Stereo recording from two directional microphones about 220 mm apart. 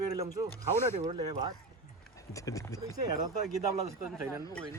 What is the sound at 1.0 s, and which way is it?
Speech, 30° right (ahead or behind).